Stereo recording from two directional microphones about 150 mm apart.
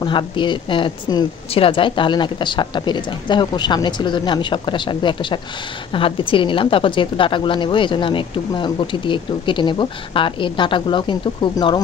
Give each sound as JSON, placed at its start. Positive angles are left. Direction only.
{"t": 0.0, "sound": "a woman's voice", "side_deg": 30}